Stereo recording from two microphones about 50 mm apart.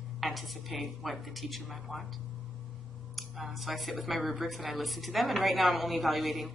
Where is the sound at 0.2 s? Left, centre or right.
Centre.